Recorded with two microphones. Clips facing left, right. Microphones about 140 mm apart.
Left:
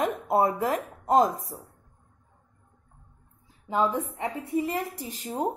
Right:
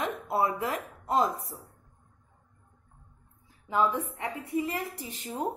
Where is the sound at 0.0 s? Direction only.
45° left (ahead or behind).